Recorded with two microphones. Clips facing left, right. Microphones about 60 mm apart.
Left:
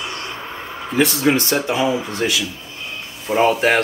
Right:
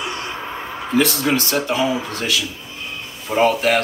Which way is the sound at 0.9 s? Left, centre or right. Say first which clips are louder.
Left 1 dB; centre.